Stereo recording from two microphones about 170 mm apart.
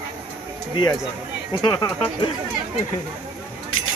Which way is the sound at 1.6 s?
25° left (ahead or behind).